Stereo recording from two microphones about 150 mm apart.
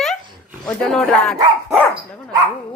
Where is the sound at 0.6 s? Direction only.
5° left (ahead or behind).